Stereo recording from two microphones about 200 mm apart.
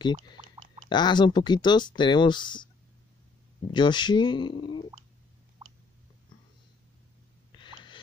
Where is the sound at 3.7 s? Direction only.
20° left (ahead or behind).